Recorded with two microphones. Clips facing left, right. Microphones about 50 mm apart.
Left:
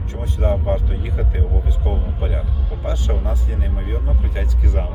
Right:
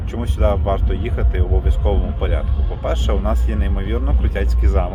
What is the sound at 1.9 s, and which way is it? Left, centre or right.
Speech, right.